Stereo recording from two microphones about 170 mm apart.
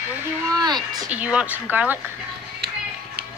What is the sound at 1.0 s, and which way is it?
Speech, 5° right (ahead or behind).